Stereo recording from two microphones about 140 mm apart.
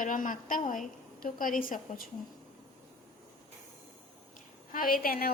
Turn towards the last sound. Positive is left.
turn(degrees=90)